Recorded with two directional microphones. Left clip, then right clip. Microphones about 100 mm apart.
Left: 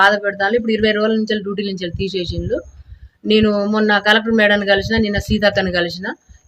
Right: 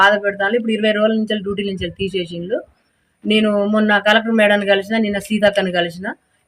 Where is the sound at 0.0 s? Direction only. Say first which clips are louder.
Even; 45° left (ahead or behind).